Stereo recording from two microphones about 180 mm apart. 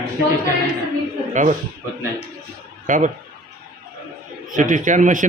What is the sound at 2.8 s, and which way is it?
Speech, 45° right (ahead or behind).